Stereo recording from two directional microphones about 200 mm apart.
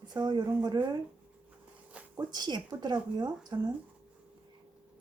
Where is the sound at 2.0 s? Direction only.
5° right (ahead or behind).